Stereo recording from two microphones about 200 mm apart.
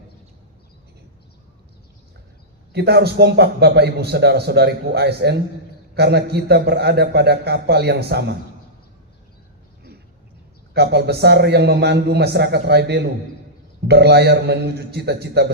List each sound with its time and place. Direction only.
2.7 s a man's voice: 55° right (ahead or behind)
10.8 s a man's voice: 55° right (ahead or behind)